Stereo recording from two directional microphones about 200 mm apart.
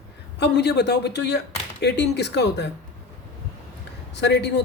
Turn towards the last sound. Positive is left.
turn(degrees=60)  # may be behind; listen again after turning